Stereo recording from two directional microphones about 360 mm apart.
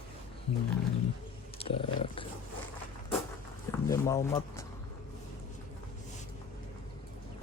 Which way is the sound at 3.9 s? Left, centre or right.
Centre.